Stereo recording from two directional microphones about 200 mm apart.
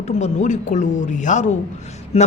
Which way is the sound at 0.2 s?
35° left (ahead or behind).